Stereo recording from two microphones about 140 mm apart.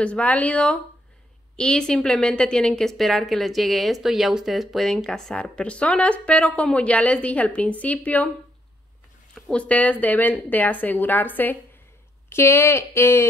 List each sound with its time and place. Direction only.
0.0 s a woman's voice: 10° left (ahead or behind)
9.3 s a woman's voice: 10° left (ahead or behind)